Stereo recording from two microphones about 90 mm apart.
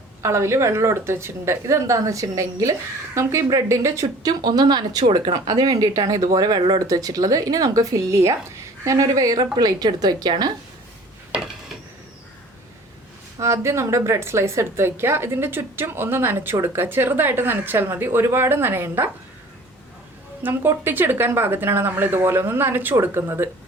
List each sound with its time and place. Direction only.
0.2 s speech: 35° right (ahead or behind); by 5.3 s 65° right (ahead or behind)
5.3 s speech: 50° right (ahead or behind)
5.8 s speech: 40° right (ahead or behind)
13.4 s a woman's voice: 35° right (ahead or behind)
20.4 s a woman's voice: 25° right (ahead or behind)